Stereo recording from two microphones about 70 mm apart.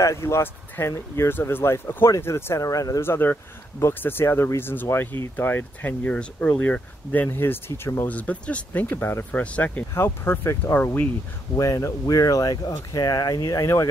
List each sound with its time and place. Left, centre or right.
0.0 s speech: left
3.0 s speech: left
8.1 s speech: left
8.8 s speech: left
9.4 s speech: centre
9.9 s speech: left
11.5 s speech: left